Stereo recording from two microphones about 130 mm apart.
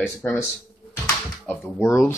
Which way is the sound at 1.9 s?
20° left (ahead or behind).